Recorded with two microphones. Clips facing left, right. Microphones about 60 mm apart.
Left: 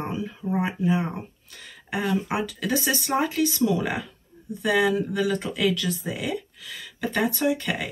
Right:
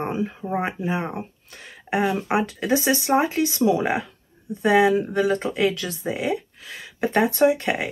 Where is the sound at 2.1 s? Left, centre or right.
Right.